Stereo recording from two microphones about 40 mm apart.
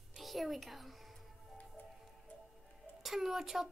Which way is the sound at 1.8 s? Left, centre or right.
Left.